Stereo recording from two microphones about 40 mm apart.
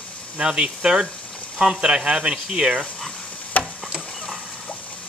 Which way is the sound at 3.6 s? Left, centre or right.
Left.